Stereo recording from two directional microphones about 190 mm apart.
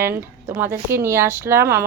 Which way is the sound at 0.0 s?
10° right (ahead or behind).